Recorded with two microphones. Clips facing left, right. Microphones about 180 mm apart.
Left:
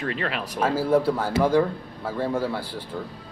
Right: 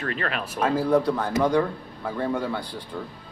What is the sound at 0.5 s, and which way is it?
A man's voice, 5° left (ahead or behind).